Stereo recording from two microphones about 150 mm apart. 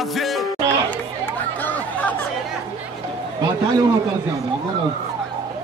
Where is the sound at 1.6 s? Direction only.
10° left (ahead or behind).